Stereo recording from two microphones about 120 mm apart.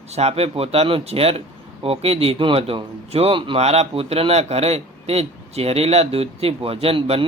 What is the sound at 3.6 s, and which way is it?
A man's voice, 60° right (ahead or behind).